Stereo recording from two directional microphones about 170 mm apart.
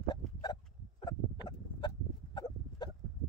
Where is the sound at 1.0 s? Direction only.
25° left (ahead or behind).